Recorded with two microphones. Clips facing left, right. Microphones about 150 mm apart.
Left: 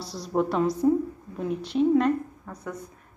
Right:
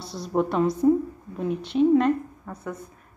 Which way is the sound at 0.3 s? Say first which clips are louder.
Right 1 dB; 5° right (ahead or behind).